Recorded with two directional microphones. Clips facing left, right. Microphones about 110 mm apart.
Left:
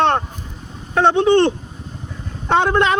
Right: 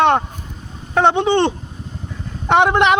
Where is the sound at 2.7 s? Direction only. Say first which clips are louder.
Right 2 dB; 20° right (ahead or behind).